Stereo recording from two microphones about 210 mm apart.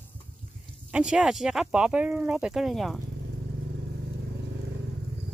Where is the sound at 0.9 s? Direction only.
5° right (ahead or behind).